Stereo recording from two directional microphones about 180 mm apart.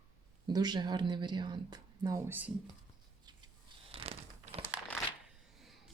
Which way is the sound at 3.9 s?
30° right (ahead or behind).